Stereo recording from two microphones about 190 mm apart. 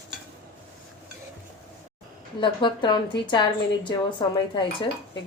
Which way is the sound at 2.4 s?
25° left (ahead or behind).